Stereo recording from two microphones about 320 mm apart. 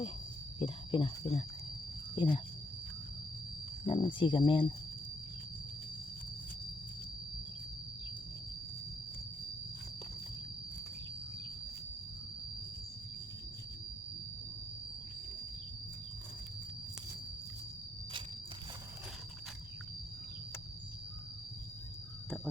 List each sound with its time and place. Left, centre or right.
0.6 s speech: centre
3.8 s speech: centre